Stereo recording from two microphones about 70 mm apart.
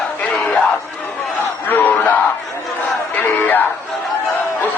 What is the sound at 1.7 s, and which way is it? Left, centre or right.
Battle cry, left.